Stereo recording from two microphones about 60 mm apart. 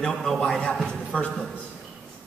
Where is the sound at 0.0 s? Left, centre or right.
Centre.